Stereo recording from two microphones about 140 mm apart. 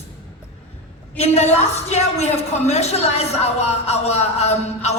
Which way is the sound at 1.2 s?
50° left (ahead or behind).